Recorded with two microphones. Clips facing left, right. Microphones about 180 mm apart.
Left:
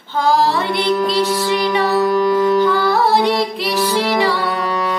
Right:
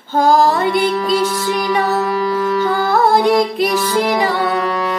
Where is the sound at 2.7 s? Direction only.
45° right (ahead or behind).